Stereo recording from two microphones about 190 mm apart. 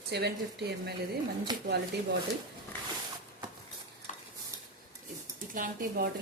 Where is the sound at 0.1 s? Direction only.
60° right (ahead or behind).